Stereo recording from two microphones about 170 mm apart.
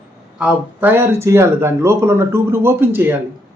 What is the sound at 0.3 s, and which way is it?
Speech, 10° right (ahead or behind).